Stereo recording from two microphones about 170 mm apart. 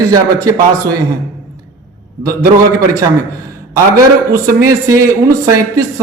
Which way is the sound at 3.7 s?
20° right (ahead or behind).